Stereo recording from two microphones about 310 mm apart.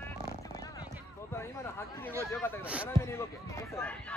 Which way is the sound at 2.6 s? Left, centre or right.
Centre.